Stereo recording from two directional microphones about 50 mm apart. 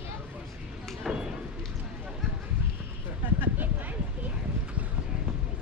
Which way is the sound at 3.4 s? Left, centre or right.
Right.